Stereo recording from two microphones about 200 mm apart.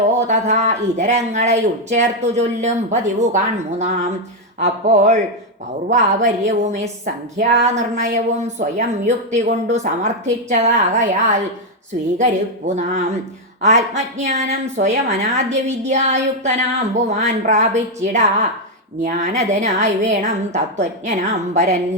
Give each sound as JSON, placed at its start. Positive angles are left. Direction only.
{"t": 0.3, "sound": "a woman's voice", "side_deg": -35}